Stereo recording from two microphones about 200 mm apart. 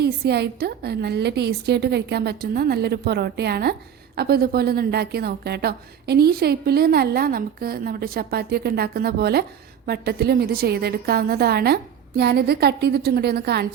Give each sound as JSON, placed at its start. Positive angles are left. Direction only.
{"t": 0.0, "sound": "a woman's voice", "side_deg": -55}